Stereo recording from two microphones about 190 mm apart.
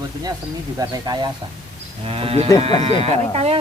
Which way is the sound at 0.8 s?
20° right (ahead or behind).